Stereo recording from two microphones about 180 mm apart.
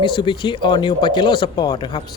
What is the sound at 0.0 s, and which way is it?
Speech, 25° left (ahead or behind).